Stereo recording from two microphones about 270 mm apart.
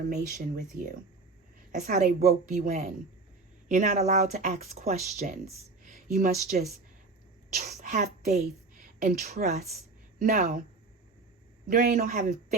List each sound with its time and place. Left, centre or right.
0.0 s speech: right
1.7 s speech: right
11.7 s speech: right